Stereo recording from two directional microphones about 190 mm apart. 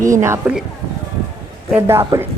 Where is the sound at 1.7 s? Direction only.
10° right (ahead or behind).